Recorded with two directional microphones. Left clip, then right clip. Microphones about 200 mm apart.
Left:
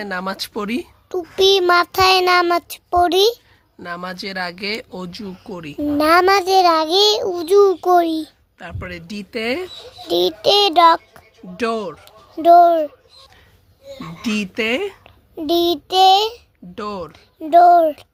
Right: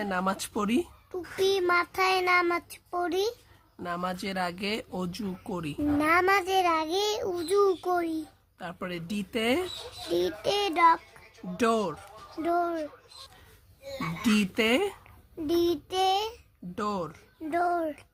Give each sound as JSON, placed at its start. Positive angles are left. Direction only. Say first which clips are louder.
{"t": 0.0, "sound": "speech", "louder": "left 5 dB", "side_deg": 15}
{"t": 1.1, "sound": "child singing", "louder": "left 12 dB", "side_deg": 35}
{"t": 3.8, "sound": "speech", "louder": "left 5 dB", "side_deg": 15}
{"t": 6.0, "sound": "a child's voice", "louder": "left 11 dB", "side_deg": 30}
{"t": 8.5, "sound": "speech", "louder": "left 5 dB", "side_deg": 10}
{"t": 10.1, "sound": "child singing", "louder": "left 12 dB", "side_deg": 30}
{"t": 11.5, "sound": "speech", "louder": "left 5 dB", "side_deg": 5}
{"t": 12.4, "sound": "child singing", "louder": "left 18 dB", "side_deg": 30}
{"t": 14.3, "sound": "speech", "louder": "left 5 dB", "side_deg": 10}
{"t": 15.0, "sound": "a child's voice", "louder": "left 10 dB", "side_deg": 30}
{"t": 16.7, "sound": "speech", "louder": "left 4 dB", "side_deg": 10}
{"t": 17.5, "sound": "a child's voice", "louder": "left 18 dB", "side_deg": 30}